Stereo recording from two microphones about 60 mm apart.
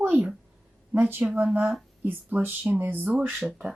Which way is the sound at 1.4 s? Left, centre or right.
Right.